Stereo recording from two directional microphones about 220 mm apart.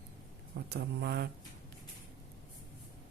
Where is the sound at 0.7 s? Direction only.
45° right (ahead or behind).